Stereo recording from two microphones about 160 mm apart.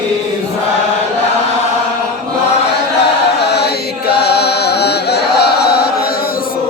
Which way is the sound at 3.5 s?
90° left.